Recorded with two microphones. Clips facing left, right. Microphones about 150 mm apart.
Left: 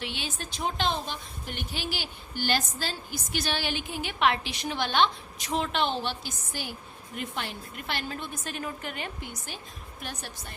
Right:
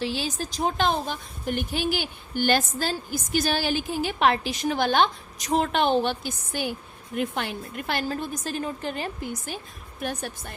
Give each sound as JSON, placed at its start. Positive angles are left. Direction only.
{"t": 0.0, "sound": "a woman's voice", "side_deg": -40}
{"t": 10.0, "sound": "a woman's voice", "side_deg": -50}